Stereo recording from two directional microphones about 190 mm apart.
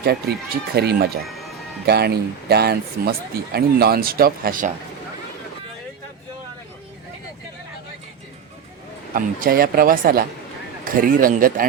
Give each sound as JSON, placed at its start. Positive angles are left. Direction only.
{"t": 0.0, "sound": "speech", "side_deg": -55}
{"t": 9.1, "sound": "speech", "side_deg": -50}